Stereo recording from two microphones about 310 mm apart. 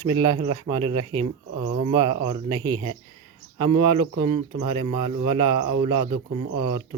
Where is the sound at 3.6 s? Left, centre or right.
Right.